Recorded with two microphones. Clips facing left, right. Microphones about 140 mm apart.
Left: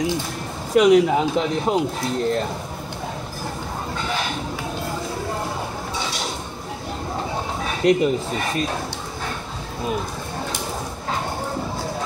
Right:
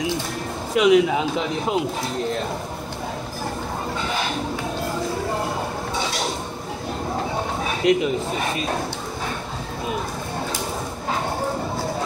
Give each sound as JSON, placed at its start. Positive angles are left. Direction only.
{"t": 0.7, "sound": "speech", "side_deg": 45}
{"t": 1.1, "sound": "a man's voice", "side_deg": 0}
{"t": 7.8, "sound": "a man's voice", "side_deg": 0}